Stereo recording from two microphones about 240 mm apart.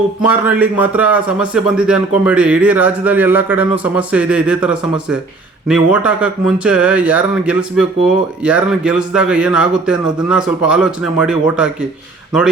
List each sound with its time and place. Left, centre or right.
0.3 s speech: centre